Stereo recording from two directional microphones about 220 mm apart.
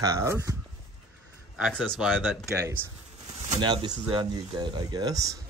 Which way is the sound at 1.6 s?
Centre (ahead or behind).